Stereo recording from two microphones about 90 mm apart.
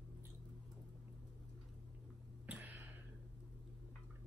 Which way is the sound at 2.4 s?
20° right (ahead or behind).